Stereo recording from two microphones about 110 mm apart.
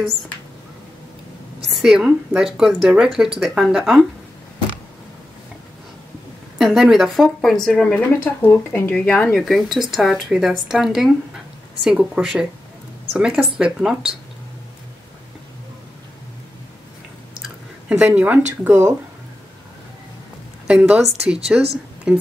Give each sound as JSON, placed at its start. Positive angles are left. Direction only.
{"t": 1.8, "sound": "speech", "side_deg": -5}
{"t": 6.6, "sound": "speech", "side_deg": 0}
{"t": 9.4, "sound": "speech", "side_deg": 0}
{"t": 17.8, "sound": "speech", "side_deg": -15}
{"t": 18.6, "sound": "speech", "side_deg": -25}
{"t": 20.6, "sound": "speech", "side_deg": -10}